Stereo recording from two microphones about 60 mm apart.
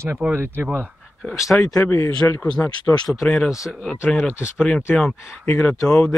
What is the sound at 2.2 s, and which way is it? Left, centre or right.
Speech, left.